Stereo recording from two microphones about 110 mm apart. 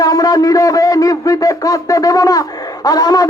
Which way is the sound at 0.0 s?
35° left (ahead or behind).